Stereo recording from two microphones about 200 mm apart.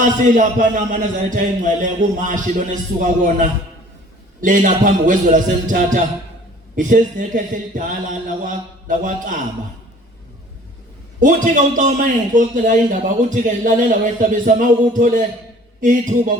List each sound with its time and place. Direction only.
0.0 s a man's voice: 40° right (ahead or behind)
11.8 s a man's voice: 40° right (ahead or behind)